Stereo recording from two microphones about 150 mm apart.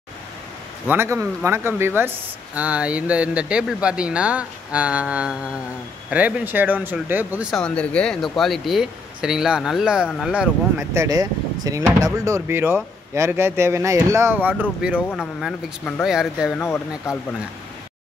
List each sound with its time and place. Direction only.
0.8 s speech: 15° right (ahead or behind)
7.5 s speech: 5° left (ahead or behind)
10.8 s speech: 20° right (ahead or behind); by 16.5 s 5° right (ahead or behind)
16.5 s speech: 20° left (ahead or behind)